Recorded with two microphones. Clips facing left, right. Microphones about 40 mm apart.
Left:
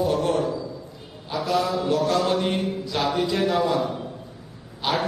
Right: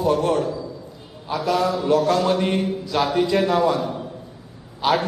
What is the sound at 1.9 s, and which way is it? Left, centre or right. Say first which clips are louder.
Speech: right 4 dB; centre.